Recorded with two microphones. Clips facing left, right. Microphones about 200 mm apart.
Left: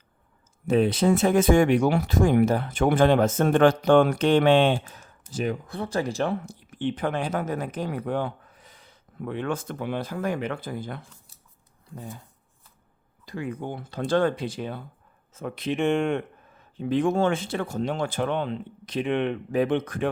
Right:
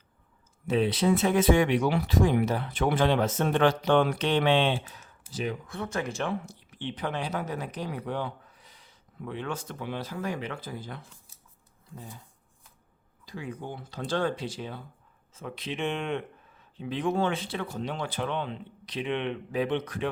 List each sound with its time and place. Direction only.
0.7 s speech: 45° left (ahead or behind)
13.2 s speech: 55° left (ahead or behind)